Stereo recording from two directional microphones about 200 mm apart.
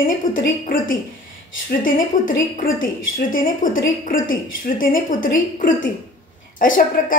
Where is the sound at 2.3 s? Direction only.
40° left (ahead or behind).